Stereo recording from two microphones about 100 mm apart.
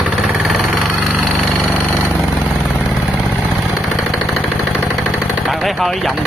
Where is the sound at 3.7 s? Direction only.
Centre (ahead or behind).